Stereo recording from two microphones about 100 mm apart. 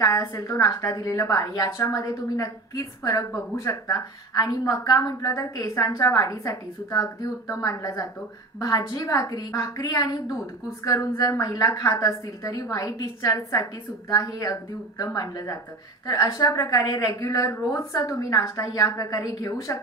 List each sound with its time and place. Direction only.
0.0 s a woman's voice: 30° left (ahead or behind)